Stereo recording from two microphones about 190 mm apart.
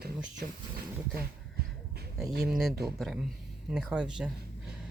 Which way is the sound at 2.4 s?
Centre (ahead or behind).